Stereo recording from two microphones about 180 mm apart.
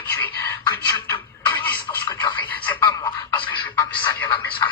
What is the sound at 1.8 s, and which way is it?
Radio, 20° left (ahead or behind).